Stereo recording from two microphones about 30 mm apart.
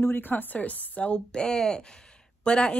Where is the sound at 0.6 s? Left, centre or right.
Left.